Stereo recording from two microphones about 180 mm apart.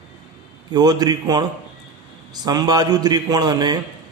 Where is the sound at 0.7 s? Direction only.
20° right (ahead or behind).